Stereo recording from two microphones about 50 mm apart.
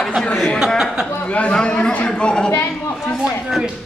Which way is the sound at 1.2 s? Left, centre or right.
Left.